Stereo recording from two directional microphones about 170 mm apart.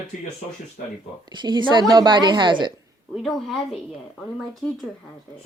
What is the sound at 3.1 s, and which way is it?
Speech, centre (ahead or behind).